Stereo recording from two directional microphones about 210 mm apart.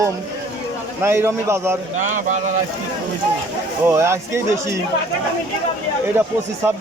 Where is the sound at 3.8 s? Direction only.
10° right (ahead or behind).